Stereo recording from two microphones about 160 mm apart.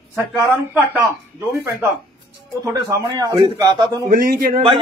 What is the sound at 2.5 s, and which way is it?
A man's voice, 20° right (ahead or behind).